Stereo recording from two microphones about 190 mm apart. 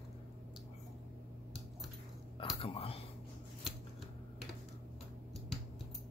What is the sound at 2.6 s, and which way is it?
Speech, 30° left (ahead or behind).